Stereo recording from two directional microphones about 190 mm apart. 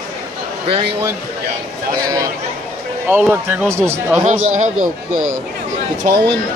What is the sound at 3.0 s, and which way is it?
Speech, 10° right (ahead or behind).